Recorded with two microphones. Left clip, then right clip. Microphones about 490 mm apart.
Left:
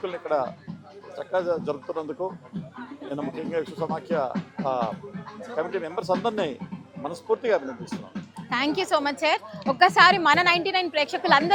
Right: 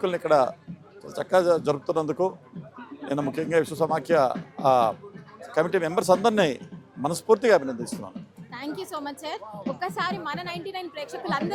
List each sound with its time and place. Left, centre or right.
0.0 s speech: right
8.4 s a woman's voice: left